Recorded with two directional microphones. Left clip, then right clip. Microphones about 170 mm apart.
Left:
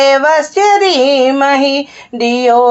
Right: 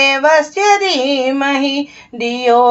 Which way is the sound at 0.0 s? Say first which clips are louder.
Left 2 dB; 30° left (ahead or behind).